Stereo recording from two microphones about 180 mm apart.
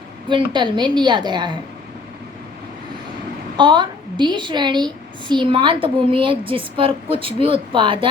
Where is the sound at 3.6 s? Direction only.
25° right (ahead or behind).